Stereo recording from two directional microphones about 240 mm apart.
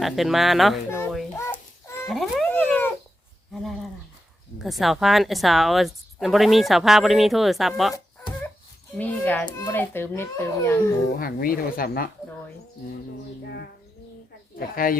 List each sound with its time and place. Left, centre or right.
0.0 s speech: centre
0.9 s a sound: centre
4.6 s speech: centre
9.0 s a child's voice: centre
11.2 s speech: left